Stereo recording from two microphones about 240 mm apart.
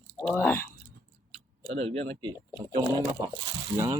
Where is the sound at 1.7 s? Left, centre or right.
Right.